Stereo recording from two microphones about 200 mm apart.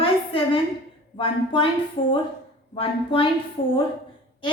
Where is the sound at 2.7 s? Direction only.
25° left (ahead or behind).